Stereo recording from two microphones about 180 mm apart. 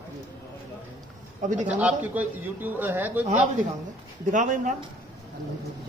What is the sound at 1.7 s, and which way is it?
Speech, 10° right (ahead or behind).